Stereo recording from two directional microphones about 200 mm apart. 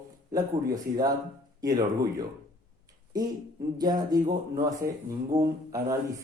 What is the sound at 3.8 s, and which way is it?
Speech, 20° right (ahead or behind).